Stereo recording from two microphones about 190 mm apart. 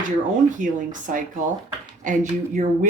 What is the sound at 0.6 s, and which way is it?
Speech, 40° right (ahead or behind).